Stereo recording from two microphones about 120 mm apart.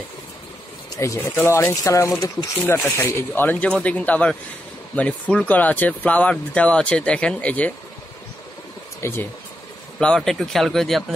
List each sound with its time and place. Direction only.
0.9 s speech: 25° left (ahead or behind)
9.0 s speech: 20° left (ahead or behind)
9.9 s speech: 5° left (ahead or behind)